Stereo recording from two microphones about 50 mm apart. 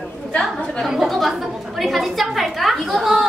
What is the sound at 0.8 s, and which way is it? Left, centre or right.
A woman's voice, centre.